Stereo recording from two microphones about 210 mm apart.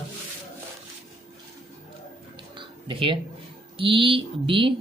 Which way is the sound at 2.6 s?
25° right (ahead or behind).